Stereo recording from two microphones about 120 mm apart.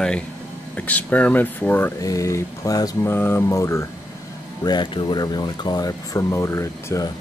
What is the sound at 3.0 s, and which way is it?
Speech, 20° left (ahead or behind).